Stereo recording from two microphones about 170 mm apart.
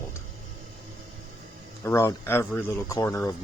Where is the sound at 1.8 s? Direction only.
15° left (ahead or behind).